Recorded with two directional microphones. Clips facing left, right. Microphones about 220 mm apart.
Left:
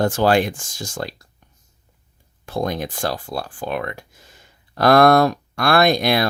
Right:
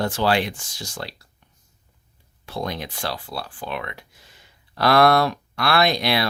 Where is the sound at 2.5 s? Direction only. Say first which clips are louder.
Left 5 dB; 45° left (ahead or behind).